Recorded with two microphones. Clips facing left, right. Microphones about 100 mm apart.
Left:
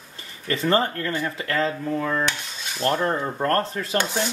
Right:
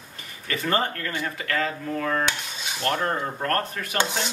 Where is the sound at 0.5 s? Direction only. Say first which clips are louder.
Left 4 dB; 25° left (ahead or behind).